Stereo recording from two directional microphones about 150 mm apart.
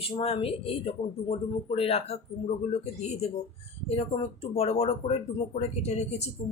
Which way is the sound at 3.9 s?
40° left (ahead or behind).